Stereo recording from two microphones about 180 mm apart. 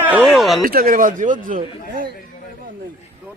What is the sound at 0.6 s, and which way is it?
Speech, 55° right (ahead or behind).